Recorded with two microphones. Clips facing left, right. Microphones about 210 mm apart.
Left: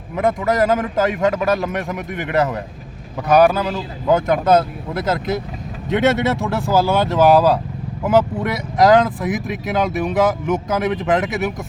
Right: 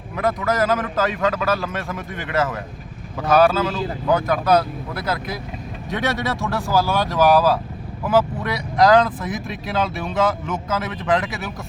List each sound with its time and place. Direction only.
0.3 s a man's voice: 20° left (ahead or behind)